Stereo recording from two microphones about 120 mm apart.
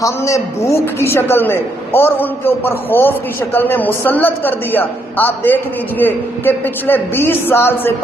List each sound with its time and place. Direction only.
0.0 s a woman's voice: 25° left (ahead or behind)